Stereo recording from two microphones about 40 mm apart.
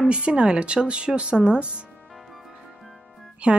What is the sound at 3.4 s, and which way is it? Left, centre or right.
Speech, right.